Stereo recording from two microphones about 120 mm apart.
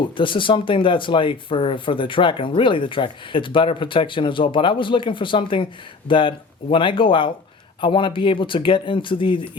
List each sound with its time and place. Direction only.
0.2 s speech: 45° left (ahead or behind)